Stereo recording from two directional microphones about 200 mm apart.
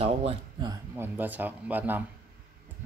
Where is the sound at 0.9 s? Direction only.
10° right (ahead or behind).